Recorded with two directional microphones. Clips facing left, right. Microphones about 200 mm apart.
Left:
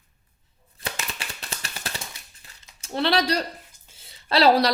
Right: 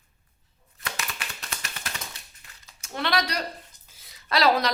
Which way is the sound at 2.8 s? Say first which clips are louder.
Left 4 dB; 30° left (ahead or behind).